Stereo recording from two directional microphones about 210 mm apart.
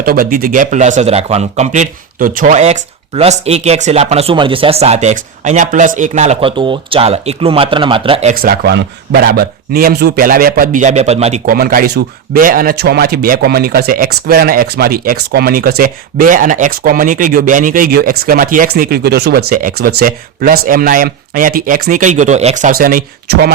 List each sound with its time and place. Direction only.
0.0 s speech: 45° right (ahead or behind)
11.5 s speech: 45° right (ahead or behind)